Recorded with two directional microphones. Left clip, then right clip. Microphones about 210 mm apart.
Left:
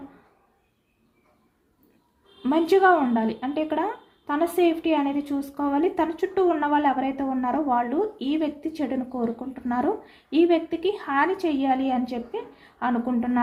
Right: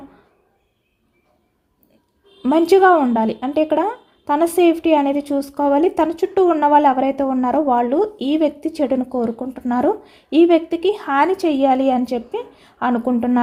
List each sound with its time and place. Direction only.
2.4 s speech: 50° right (ahead or behind)